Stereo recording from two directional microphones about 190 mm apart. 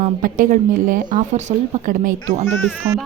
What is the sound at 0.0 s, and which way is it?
Speech, 45° right (ahead or behind).